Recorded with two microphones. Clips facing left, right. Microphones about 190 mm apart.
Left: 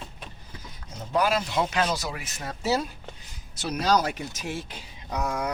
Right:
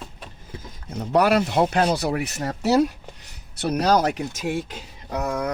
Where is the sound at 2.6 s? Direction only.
70° right (ahead or behind).